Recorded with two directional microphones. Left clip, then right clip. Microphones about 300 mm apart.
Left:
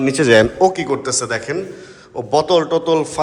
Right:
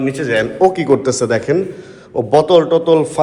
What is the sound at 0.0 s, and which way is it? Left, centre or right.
Speech, left.